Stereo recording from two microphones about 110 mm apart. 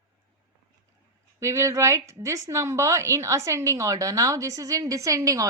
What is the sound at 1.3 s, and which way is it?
A woman's voice, 25° right (ahead or behind).